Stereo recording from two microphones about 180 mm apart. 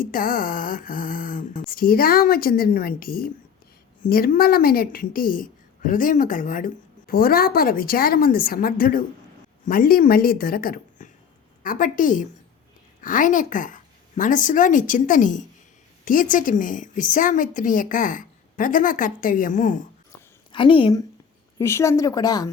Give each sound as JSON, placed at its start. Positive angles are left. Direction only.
{"t": 0.0, "sound": "a woman's voice", "side_deg": 50}
{"t": 20.5, "sound": "a woman's voice", "side_deg": 30}
{"t": 21.6, "sound": "speech", "side_deg": 15}